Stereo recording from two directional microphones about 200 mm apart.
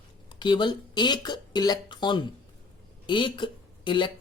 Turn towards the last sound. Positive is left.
turn(degrees=25)  # may be behind; listen again after turning